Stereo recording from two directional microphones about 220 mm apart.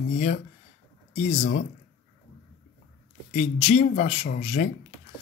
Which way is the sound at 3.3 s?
30° left (ahead or behind).